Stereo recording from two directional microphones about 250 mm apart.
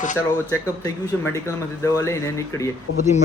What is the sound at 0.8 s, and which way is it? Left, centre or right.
Speech, centre.